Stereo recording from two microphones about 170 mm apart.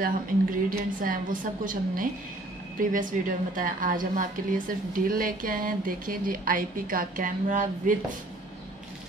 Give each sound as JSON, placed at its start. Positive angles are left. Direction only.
{"t": 0.7, "sound": "a woman's voice", "side_deg": -55}